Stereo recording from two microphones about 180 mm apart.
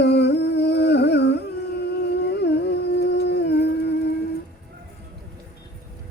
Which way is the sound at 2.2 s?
70° left (ahead or behind).